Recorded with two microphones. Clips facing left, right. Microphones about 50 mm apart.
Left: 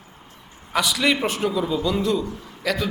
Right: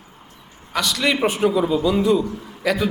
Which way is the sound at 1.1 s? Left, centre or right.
Centre.